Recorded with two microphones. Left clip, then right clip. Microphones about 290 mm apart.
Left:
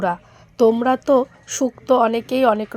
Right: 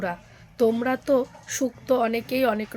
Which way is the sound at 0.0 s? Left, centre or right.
Centre.